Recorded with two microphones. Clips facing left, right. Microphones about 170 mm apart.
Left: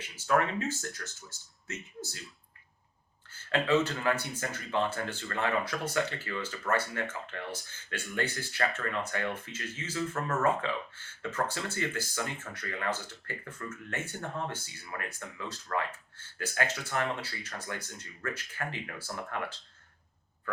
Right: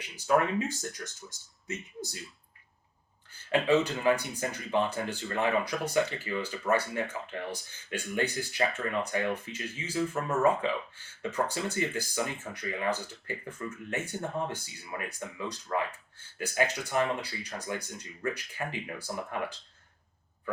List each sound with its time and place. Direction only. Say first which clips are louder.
0.3 s speech: right 2 dB; 15° right (ahead or behind)
3.5 s speech: right 2 dB; 15° right (ahead or behind)